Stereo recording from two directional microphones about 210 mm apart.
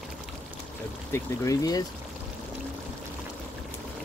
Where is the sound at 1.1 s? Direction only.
15° left (ahead or behind).